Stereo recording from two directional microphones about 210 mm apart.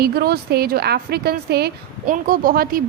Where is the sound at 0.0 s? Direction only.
50° right (ahead or behind).